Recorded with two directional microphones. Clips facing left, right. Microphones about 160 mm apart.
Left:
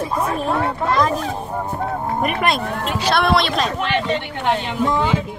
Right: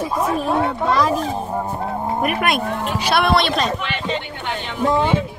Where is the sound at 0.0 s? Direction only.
5° right (ahead or behind).